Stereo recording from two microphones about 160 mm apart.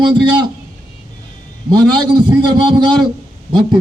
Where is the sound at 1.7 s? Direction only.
25° right (ahead or behind).